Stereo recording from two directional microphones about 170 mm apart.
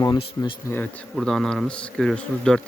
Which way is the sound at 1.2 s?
Centre (ahead or behind).